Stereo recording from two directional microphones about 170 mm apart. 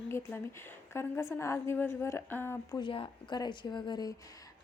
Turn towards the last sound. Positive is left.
turn(degrees=25)  # may be behind; listen again after turning